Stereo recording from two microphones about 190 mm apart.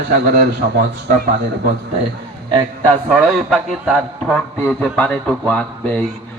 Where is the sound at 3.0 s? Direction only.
Centre (ahead or behind).